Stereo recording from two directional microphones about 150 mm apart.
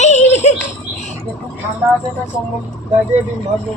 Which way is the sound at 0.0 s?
50° left (ahead or behind).